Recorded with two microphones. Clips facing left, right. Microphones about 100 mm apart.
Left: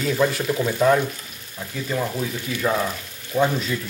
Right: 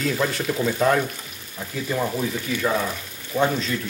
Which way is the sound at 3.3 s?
5° left (ahead or behind).